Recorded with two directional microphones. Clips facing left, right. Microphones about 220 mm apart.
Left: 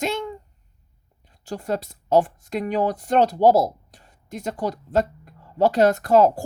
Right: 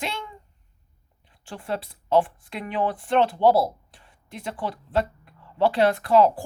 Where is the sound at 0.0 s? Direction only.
45° left (ahead or behind).